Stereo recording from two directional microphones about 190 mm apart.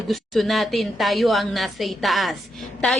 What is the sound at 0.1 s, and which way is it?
A woman's voice, centre (ahead or behind).